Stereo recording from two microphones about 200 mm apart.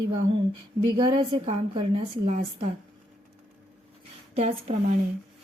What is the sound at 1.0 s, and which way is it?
A woman's voice, 25° right (ahead or behind).